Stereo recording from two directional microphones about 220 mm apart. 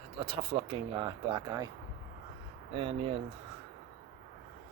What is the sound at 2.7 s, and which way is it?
Speech, 25° right (ahead or behind).